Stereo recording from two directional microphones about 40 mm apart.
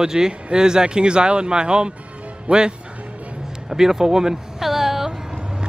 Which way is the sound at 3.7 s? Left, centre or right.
Centre.